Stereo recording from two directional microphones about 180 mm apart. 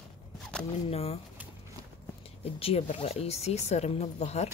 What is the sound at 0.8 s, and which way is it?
Speech, 35° left (ahead or behind).